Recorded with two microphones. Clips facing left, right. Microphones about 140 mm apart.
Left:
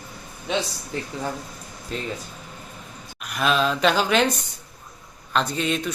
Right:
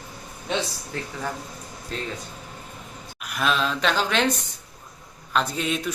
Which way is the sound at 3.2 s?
Centre (ahead or behind).